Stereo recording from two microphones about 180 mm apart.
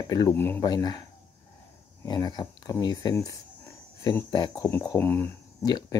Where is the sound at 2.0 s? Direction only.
25° left (ahead or behind).